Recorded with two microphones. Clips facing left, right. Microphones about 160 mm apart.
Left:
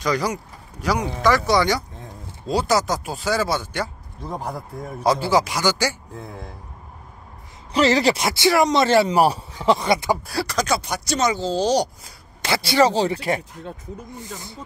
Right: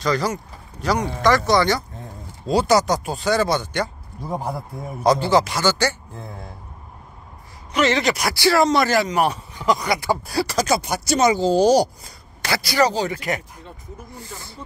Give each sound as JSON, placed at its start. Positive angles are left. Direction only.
{"t": 0.0, "sound": "speech", "side_deg": 10}
{"t": 2.4, "sound": "speech", "side_deg": 0}
{"t": 4.2, "sound": "speech", "side_deg": -10}
{"t": 5.0, "sound": "speech", "side_deg": 5}
{"t": 7.7, "sound": "speech", "side_deg": 35}
{"t": 8.8, "sound": "speech", "side_deg": 30}
{"t": 10.2, "sound": "speech", "side_deg": 0}
{"t": 12.4, "sound": "speech", "side_deg": 25}
{"t": 14.3, "sound": "speech", "side_deg": 20}